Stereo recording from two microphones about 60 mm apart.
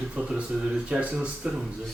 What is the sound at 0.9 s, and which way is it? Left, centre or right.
Speech, right.